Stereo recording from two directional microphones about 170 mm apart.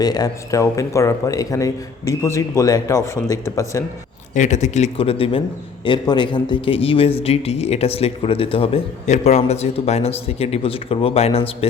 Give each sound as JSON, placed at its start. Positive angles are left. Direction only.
{"t": 0.0, "sound": "speech", "side_deg": 20}
{"t": 4.4, "sound": "speech", "side_deg": 45}